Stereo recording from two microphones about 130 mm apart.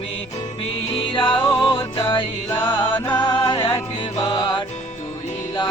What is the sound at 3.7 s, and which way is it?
Music, 30° left (ahead or behind).